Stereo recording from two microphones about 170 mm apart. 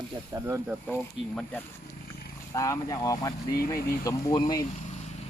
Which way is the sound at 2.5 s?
20° left (ahead or behind).